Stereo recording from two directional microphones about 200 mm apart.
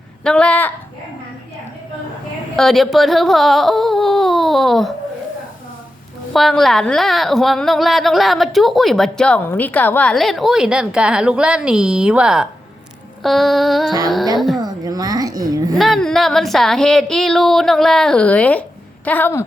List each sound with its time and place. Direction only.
0.3 s speech: 5° left (ahead or behind)
2.6 s speech: centre (ahead or behind)
6.3 s a woman's voice: centre (ahead or behind)
14.6 s a sound: 20° right (ahead or behind)
15.8 s a woman's voice: centre (ahead or behind)